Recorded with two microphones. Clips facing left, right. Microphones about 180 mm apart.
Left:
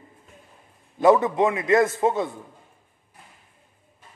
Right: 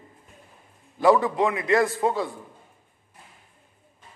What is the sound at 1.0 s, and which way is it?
A man's voice, 20° left (ahead or behind).